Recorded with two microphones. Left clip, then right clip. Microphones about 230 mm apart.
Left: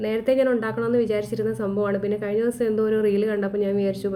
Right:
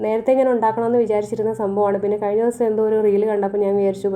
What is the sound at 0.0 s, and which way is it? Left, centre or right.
A woman's voice, centre.